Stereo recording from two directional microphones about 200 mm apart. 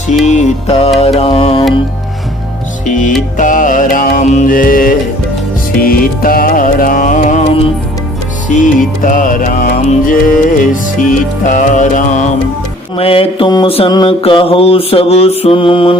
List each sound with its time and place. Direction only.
0.3 s music: 35° left (ahead or behind)
0.9 s mantra: 30° left (ahead or behind)
2.8 s music: 40° left (ahead or behind)
13.0 s mantra: 25° left (ahead or behind)